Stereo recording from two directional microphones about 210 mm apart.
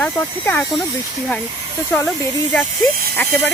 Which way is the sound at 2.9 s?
45° right (ahead or behind).